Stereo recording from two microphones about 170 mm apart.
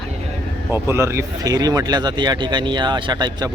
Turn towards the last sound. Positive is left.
turn(degrees=-25)  # may be behind; listen again after turning